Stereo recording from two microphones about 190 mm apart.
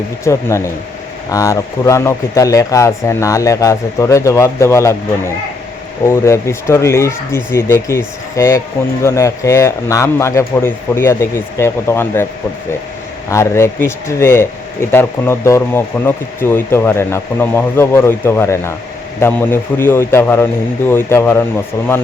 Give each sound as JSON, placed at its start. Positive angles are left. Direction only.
{"t": 0.3, "sound": "speech", "side_deg": 15}
{"t": 13.3, "sound": "speech", "side_deg": 15}